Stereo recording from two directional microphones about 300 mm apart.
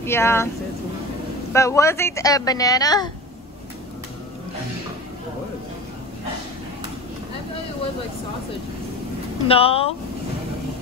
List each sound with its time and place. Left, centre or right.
0.0 s a woman's voice: centre
1.5 s a woman's voice: centre
9.5 s speech: centre